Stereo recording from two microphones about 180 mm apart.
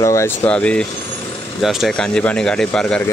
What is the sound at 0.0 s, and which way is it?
Speech, 15° left (ahead or behind).